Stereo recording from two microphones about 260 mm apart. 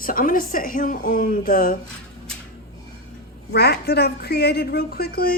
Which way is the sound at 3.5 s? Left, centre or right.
Left.